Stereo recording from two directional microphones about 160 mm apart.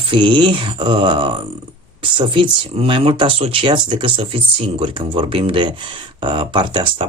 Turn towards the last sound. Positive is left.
turn(degrees=-30)  # may be behind; listen again after turning